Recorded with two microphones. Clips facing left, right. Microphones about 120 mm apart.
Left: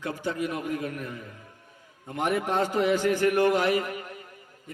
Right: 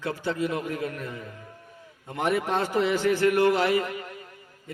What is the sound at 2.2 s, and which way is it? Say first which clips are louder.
A man's voice: even; 15° left (ahead or behind).